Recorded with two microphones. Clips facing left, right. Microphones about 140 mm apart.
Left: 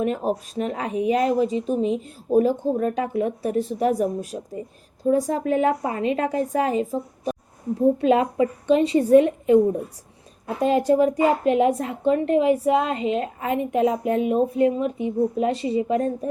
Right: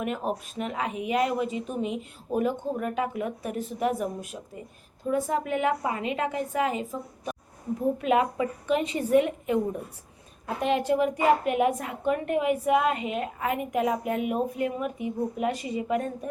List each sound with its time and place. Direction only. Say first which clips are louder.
0.0 s a woman's voice: left 6 dB; 35° left (ahead or behind)